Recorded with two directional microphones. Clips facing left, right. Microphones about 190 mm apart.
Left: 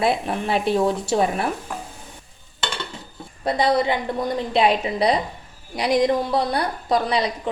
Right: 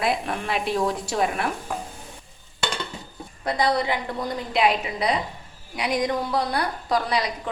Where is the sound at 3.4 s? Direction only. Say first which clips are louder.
Left 3 dB; 25° left (ahead or behind).